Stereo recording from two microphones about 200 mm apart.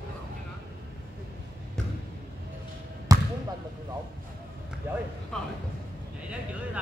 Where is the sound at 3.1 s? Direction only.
15° right (ahead or behind).